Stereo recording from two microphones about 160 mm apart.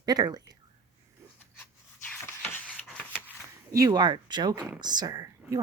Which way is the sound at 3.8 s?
25° right (ahead or behind).